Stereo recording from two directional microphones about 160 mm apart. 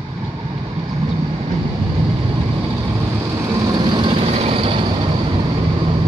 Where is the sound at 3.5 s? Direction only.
25° right (ahead or behind).